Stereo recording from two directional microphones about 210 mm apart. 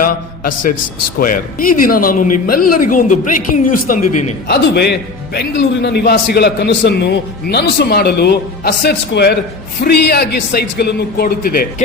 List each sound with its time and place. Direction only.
1.2 s speech: 40° left (ahead or behind)